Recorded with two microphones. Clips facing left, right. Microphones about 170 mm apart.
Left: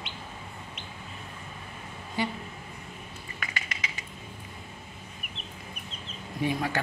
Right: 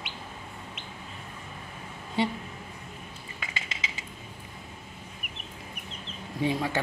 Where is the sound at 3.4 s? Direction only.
25° right (ahead or behind).